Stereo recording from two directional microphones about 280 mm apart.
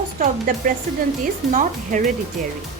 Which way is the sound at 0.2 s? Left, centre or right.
Right.